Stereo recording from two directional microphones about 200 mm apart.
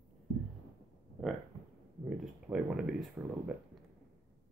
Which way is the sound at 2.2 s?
5° right (ahead or behind).